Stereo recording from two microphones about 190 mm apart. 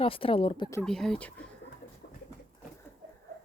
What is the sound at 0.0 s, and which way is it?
Speech, 30° left (ahead or behind).